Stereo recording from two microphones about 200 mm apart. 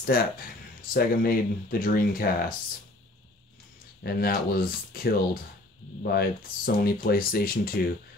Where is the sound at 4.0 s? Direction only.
50° left (ahead or behind).